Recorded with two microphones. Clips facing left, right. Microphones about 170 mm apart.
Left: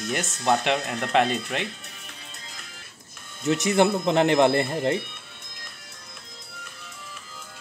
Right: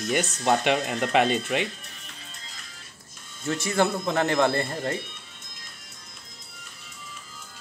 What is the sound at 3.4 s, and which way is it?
Speech, 20° left (ahead or behind).